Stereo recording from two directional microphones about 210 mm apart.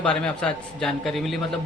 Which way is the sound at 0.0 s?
5° left (ahead or behind).